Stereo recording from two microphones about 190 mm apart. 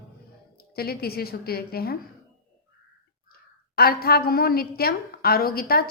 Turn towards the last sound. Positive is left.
turn(degrees=50)  # may be behind; listen again after turning